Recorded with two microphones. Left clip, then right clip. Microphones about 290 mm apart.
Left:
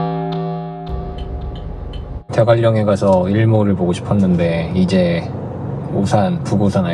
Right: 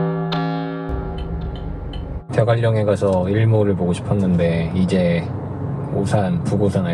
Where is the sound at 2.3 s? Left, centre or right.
Centre.